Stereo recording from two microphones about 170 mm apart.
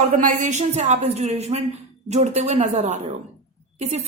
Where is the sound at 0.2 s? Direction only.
50° right (ahead or behind).